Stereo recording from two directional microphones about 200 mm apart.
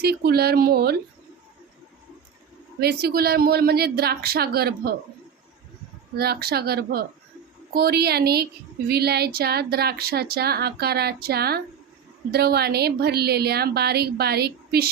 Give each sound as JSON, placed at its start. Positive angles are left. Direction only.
{"t": 0.0, "sound": "a woman's voice", "side_deg": -50}
{"t": 2.8, "sound": "a woman's voice", "side_deg": -50}
{"t": 6.1, "sound": "a woman's voice", "side_deg": -50}